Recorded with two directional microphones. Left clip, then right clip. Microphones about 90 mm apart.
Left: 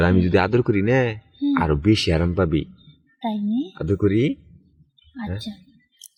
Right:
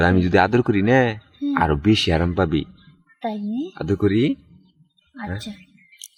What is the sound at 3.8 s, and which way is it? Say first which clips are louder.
Speech: right 1 dB; 15° right (ahead or behind).